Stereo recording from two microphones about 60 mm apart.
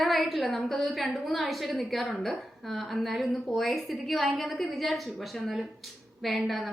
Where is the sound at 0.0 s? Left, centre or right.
Centre.